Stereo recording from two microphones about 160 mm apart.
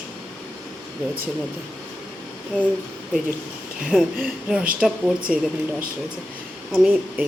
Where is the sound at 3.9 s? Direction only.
Centre (ahead or behind).